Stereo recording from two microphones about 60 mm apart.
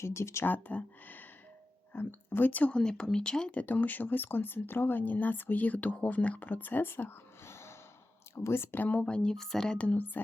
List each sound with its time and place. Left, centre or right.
0.0 s speech: left
0.4 s speech: left
2.7 s speech: centre
9.3 s speech: centre
9.7 s speech: left